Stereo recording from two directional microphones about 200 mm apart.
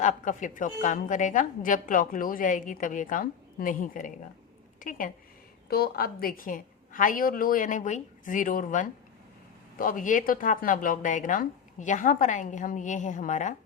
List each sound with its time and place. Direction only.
0.0 s a woman's voice: 40° left (ahead or behind)